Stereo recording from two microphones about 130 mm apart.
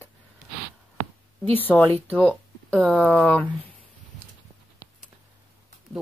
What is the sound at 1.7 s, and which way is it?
Speech, 10° left (ahead or behind).